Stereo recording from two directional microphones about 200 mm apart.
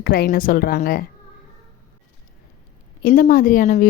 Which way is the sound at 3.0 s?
45° left (ahead or behind).